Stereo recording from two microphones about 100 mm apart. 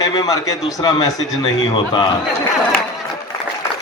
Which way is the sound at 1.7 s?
55° left (ahead or behind).